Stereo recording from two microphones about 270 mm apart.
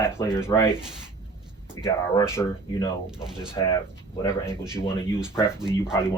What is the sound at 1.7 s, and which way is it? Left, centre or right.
Speech, centre.